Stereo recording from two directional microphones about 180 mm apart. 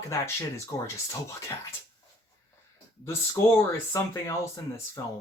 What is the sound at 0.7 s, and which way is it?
Speech, 15° left (ahead or behind).